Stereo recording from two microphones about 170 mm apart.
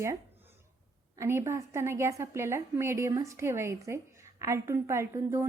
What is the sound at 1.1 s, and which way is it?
A woman's voice, 15° right (ahead or behind).